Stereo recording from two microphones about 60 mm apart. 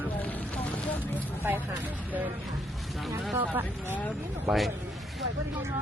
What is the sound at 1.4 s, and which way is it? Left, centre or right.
Speech, right.